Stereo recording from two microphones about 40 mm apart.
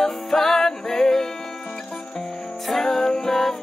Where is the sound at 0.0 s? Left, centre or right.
Centre.